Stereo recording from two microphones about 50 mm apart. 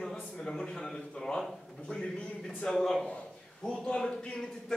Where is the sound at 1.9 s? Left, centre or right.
Left.